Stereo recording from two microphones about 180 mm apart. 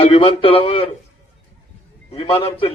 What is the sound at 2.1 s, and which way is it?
Speech, 30° left (ahead or behind).